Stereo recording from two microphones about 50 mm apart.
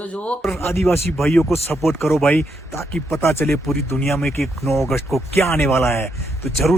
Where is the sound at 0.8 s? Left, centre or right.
Left.